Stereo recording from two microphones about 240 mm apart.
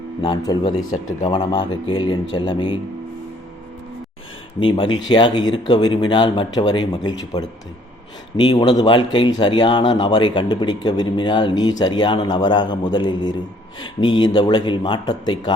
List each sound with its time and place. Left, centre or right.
0.2 s speech: centre
4.6 s speech: centre